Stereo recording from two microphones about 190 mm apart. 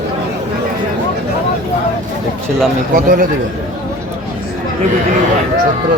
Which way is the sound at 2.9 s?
45° right (ahead or behind).